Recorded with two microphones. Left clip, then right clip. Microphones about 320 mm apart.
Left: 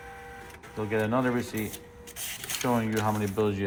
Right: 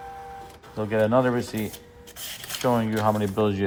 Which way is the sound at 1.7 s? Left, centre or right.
Centre.